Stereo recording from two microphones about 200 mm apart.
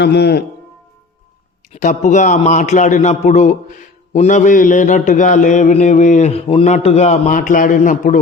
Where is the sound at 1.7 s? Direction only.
35° left (ahead or behind).